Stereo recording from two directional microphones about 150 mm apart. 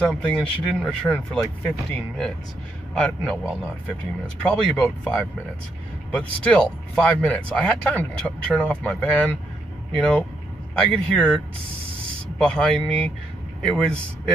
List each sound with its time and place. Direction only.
0.0 s speech: 5° left (ahead or behind)